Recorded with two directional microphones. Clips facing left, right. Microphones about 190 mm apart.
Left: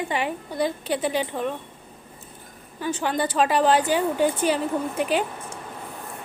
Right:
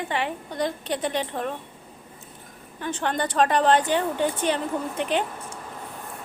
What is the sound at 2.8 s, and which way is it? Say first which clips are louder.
A woman's voice: left 2 dB; 5° left (ahead or behind).